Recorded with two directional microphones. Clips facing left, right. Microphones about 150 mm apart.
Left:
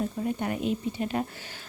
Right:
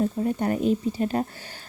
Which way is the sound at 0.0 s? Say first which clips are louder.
Right 5 dB; 40° right (ahead or behind).